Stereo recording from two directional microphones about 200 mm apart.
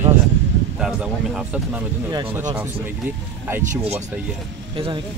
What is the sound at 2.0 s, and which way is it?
Speech, 20° right (ahead or behind).